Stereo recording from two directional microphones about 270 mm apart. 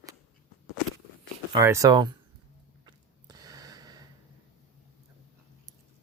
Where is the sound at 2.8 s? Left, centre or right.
Centre.